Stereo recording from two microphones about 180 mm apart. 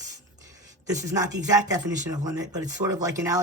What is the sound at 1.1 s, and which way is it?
Speech, 20° right (ahead or behind).